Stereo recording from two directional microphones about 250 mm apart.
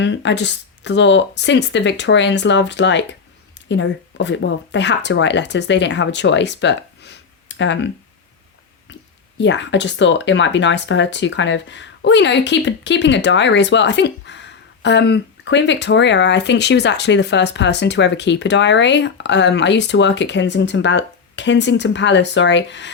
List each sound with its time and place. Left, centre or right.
0.0 s speech: left
9.4 s speech: left